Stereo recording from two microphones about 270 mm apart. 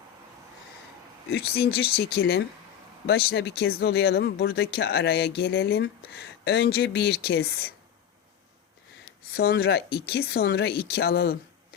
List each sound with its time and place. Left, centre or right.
1.3 s speech: left
9.3 s speech: left